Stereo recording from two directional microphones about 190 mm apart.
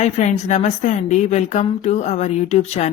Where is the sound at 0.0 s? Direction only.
35° left (ahead or behind).